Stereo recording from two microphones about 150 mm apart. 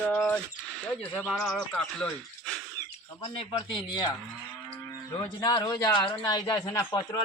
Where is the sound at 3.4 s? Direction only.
30° left (ahead or behind).